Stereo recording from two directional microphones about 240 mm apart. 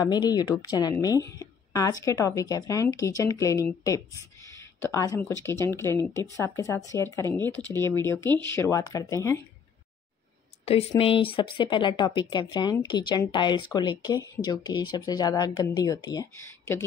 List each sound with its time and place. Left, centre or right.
0.0 s a woman's voice: centre
10.6 s a woman's voice: left